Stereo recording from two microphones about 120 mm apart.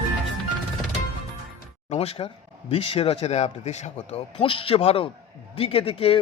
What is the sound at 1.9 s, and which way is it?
Speech, 55° left (ahead or behind).